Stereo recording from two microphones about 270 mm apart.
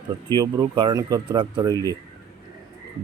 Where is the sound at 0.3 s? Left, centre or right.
Centre.